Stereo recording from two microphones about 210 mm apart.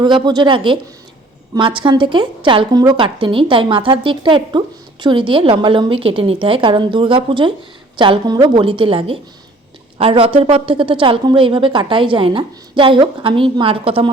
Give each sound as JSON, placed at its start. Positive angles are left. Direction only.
{"t": 0.0, "sound": "a woman's voice", "side_deg": -20}